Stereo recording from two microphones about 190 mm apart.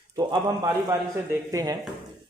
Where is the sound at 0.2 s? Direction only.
20° right (ahead or behind).